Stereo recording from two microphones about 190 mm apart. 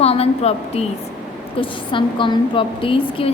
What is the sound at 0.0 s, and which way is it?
Speech, 30° left (ahead or behind).